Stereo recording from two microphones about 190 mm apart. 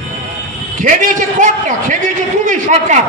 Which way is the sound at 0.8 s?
45° right (ahead or behind).